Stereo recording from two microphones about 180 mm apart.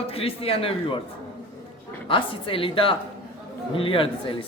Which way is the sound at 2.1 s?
30° left (ahead or behind).